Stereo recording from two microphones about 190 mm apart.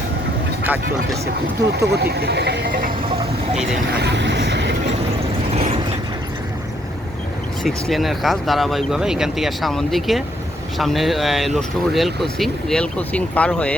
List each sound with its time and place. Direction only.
0.6 s speech: 10° right (ahead or behind)
1.7 s speech: 60° right (ahead or behind)
3.9 s vehicle: 65° right (ahead or behind)
5.5 s vehicle: 35° right (ahead or behind)
7.6 s speech: centre (ahead or behind)